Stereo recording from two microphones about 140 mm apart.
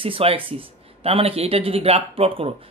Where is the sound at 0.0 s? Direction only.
40° right (ahead or behind).